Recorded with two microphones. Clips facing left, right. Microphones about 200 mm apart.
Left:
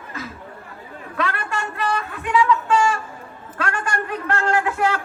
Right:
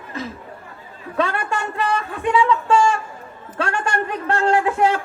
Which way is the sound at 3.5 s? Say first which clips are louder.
Right 3 dB; 25° right (ahead or behind).